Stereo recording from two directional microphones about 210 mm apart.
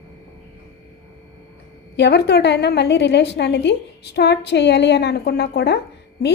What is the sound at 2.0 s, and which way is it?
A woman's voice, 55° left (ahead or behind).